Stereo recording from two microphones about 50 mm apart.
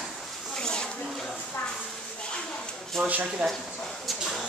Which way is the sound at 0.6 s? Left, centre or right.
Centre.